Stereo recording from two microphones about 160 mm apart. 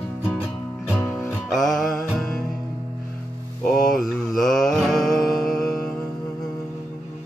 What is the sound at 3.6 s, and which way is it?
Music, 5° left (ahead or behind).